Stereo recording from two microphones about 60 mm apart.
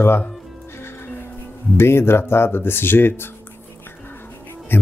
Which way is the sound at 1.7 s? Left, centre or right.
Left.